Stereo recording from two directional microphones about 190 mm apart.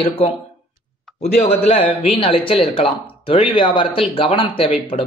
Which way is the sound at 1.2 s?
35° left (ahead or behind).